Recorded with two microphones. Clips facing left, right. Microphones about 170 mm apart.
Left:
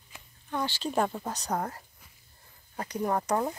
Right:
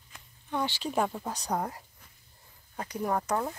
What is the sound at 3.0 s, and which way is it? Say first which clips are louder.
Speech: left 1 dB; 5° left (ahead or behind).